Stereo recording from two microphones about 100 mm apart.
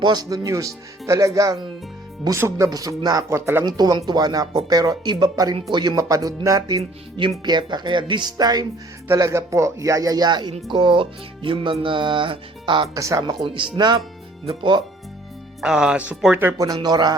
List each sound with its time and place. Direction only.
0.0 s speech: 40° right (ahead or behind)
2.6 s speech: 40° right (ahead or behind)
3.6 s speech: 40° right (ahead or behind)
6.0 s speech: 35° right (ahead or behind)
7.2 s speech: 50° right (ahead or behind)
9.0 s speech: 30° right (ahead or behind); by 12.9 s 60° right (ahead or behind)
12.9 s speech: 35° right (ahead or behind)
13.4 s speech: 55° right (ahead or behind)
15.6 s speech: 5° right (ahead or behind)
16.6 s speech: 35° right (ahead or behind)